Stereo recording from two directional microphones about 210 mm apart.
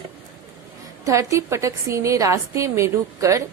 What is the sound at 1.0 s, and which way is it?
A woman's voice, 15° right (ahead or behind).